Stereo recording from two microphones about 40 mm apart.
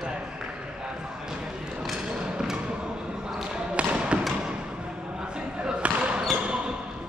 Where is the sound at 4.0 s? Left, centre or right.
Right.